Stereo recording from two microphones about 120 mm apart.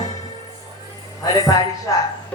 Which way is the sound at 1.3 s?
30° left (ahead or behind).